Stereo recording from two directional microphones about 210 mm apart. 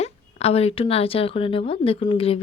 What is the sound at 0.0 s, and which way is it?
Speech, 30° left (ahead or behind).